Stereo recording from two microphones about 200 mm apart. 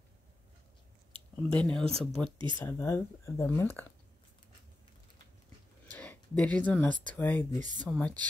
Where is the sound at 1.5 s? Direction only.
5° left (ahead or behind).